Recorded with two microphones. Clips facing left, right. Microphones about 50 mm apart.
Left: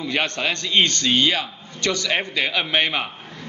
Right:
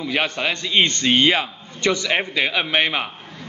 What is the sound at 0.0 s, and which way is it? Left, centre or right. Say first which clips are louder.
A man's voice: right 1 dB; centre.